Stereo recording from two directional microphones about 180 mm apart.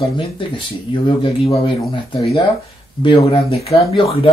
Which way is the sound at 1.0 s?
30° left (ahead or behind).